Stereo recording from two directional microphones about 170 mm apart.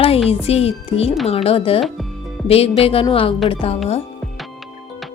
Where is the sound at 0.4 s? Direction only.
35° left (ahead or behind).